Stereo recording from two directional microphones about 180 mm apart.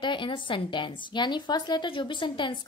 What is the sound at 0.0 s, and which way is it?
A woman's voice, 25° left (ahead or behind).